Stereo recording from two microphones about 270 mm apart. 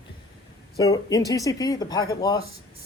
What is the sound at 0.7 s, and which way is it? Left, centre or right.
Speech, centre.